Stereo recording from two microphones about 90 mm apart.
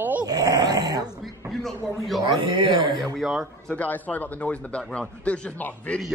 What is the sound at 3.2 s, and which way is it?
Speech, 10° right (ahead or behind).